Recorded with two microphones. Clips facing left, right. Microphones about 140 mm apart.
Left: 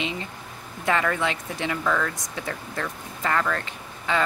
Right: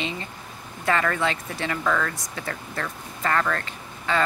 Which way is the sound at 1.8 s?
5° left (ahead or behind).